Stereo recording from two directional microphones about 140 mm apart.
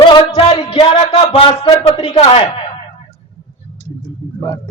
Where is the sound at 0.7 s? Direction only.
40° left (ahead or behind).